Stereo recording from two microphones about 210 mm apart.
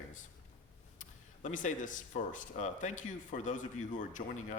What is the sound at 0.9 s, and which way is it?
Speech, 35° left (ahead or behind).